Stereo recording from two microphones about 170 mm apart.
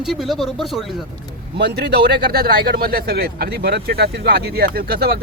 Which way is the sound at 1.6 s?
80° right.